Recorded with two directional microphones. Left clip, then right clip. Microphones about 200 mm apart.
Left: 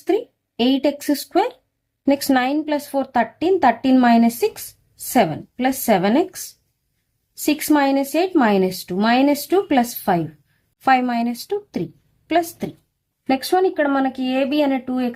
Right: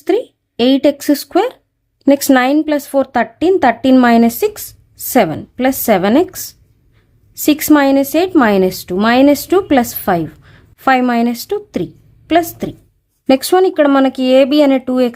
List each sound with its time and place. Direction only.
0.0 s speech: 30° right (ahead or behind)